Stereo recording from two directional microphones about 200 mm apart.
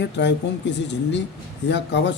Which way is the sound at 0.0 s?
60° left (ahead or behind).